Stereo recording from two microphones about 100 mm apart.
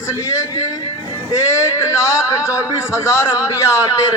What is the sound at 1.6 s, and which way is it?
A man's voice, 30° left (ahead or behind).